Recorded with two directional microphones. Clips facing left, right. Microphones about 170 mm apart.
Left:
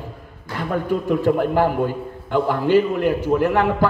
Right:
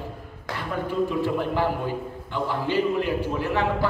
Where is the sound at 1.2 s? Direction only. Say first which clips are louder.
Left 6 dB; 50° left (ahead or behind).